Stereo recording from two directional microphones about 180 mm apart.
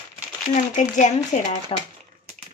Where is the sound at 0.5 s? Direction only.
45° left (ahead or behind).